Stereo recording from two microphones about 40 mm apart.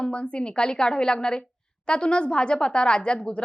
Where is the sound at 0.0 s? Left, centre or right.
Left.